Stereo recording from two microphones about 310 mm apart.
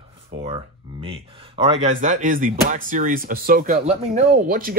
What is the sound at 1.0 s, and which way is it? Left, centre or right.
Speech, centre.